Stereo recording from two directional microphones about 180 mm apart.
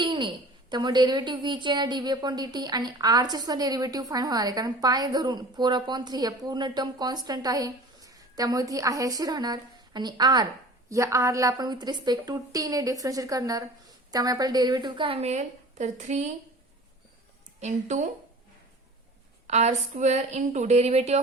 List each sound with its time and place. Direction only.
0.0 s a sound: 25° right (ahead or behind)
0.7 s a woman's voice: 25° right (ahead or behind); by 16.3 s 40° right (ahead or behind)
17.6 s a woman's voice: 40° right (ahead or behind)
19.5 s a woman's voice: 40° right (ahead or behind)